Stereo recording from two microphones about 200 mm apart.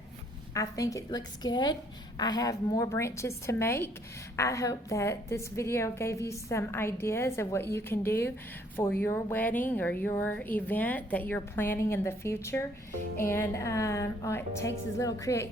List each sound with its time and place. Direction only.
0.5 s a woman's voice: 15° left (ahead or behind)